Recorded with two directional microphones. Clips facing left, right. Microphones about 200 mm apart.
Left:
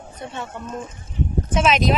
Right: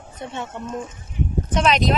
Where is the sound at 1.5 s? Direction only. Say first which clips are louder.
Even; centre (ahead or behind).